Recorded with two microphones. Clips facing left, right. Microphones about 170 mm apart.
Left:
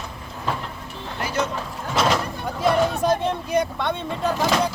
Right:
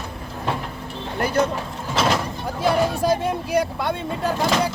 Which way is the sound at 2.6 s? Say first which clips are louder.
Even; 5° right (ahead or behind).